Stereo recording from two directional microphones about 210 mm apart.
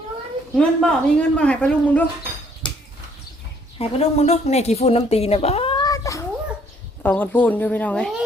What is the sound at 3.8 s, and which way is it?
A woman's voice, 30° left (ahead or behind).